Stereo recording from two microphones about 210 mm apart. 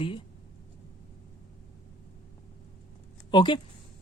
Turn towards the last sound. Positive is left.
turn(degrees=20)  # may be behind; listen again after turning